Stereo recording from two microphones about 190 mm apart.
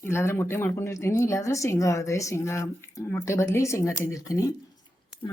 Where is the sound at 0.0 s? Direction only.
15° left (ahead or behind).